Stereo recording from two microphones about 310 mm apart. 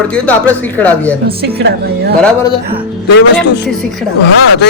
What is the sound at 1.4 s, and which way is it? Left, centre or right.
Speech, right.